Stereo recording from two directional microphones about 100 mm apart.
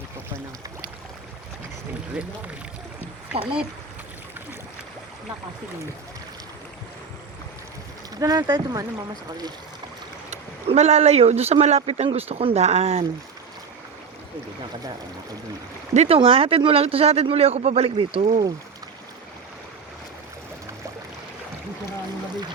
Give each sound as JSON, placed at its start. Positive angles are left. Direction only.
{"t": 8.2, "sound": "speech", "side_deg": -40}
{"t": 10.7, "sound": "speech", "side_deg": -90}
{"t": 16.0, "sound": "speech", "side_deg": -65}
{"t": 17.9, "sound": "speech", "side_deg": -75}